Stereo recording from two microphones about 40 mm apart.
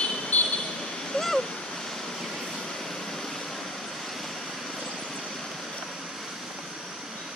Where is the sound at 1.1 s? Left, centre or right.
Centre.